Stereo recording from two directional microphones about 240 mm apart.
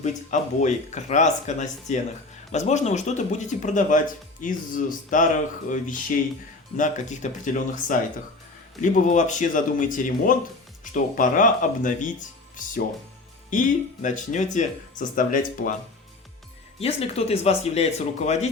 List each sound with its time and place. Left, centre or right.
0.0 s speech: left
13.5 s speech: left
16.8 s speech: left